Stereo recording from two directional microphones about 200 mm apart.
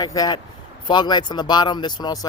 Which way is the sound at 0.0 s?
20° left (ahead or behind).